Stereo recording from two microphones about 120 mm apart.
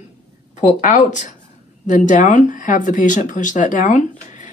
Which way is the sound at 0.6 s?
90° left.